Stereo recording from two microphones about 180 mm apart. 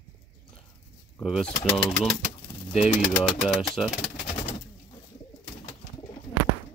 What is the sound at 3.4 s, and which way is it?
Speech, centre (ahead or behind).